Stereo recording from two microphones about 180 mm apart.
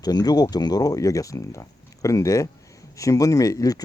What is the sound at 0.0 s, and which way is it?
Speech, 20° left (ahead or behind).